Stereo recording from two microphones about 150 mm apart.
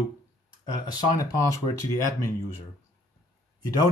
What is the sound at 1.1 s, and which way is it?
Speech, 25° left (ahead or behind).